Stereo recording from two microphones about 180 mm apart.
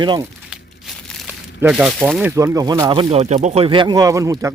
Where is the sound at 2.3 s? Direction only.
15° right (ahead or behind).